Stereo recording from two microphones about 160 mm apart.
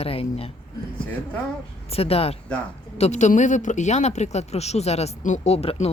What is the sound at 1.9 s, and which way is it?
A woman's voice, 40° left (ahead or behind).